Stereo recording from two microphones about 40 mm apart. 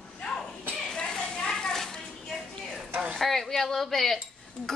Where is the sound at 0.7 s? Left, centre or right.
Centre.